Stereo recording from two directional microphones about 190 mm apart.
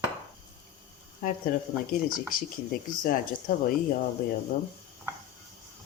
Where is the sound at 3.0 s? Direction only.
45° left (ahead or behind).